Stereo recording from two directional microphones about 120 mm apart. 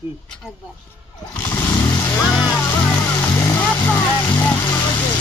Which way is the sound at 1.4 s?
20° left (ahead or behind).